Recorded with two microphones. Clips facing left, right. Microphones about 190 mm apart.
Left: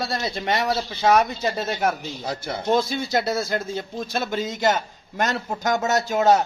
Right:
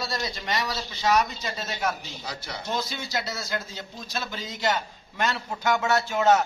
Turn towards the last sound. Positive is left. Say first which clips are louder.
# left 3 dB
turn(degrees=40)  # may be behind; listen again after turning